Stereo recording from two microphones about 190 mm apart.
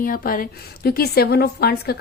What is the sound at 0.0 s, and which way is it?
A woman's voice, 50° left (ahead or behind).